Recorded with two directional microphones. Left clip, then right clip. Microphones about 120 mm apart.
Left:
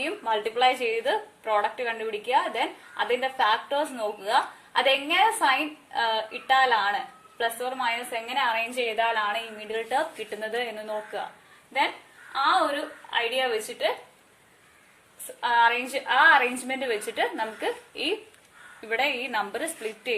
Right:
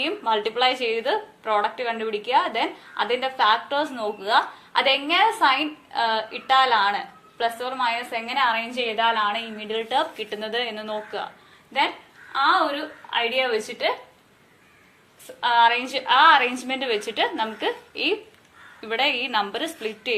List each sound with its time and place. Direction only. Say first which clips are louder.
0.0 s a woman's voice: right 4 dB; 35° left (ahead or behind)
12.4 s a woman's voice: right 3 dB; 25° left (ahead or behind)
15.4 s a woman's voice: right 3 dB; 35° left (ahead or behind)